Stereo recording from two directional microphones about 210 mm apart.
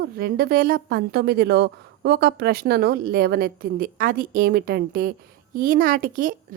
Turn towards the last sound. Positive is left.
turn(degrees=-40)  # may be behind; listen again after turning